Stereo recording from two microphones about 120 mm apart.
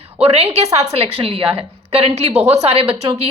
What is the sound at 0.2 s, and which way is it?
A woman's voice, 60° right (ahead or behind).